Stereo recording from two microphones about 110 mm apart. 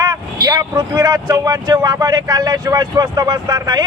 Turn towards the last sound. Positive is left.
turn(degrees=-35)  # may be behind; listen again after turning